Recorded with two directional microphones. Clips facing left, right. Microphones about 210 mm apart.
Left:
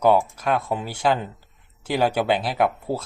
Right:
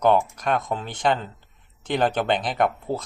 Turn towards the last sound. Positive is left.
turn(degrees=5)  # may be behind; listen again after turning